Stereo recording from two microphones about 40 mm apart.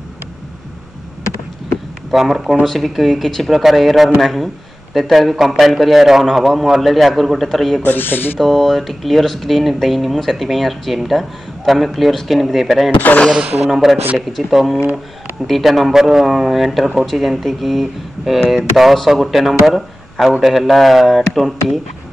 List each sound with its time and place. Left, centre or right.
2.0 s speech: centre
7.8 s speech: left
8.4 s speech: centre